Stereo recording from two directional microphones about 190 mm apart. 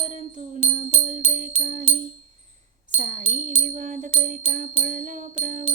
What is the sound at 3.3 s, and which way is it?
Music, 40° right (ahead or behind).